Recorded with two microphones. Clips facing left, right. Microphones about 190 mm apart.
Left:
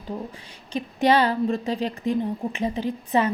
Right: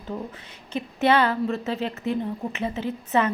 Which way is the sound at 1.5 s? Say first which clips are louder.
Left 2 dB; 15° left (ahead or behind).